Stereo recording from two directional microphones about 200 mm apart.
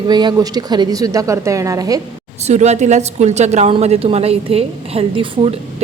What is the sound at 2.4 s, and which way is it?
A woman's voice, 35° right (ahead or behind).